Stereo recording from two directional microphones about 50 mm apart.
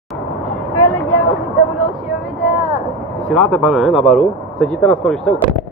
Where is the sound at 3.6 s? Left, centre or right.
Centre.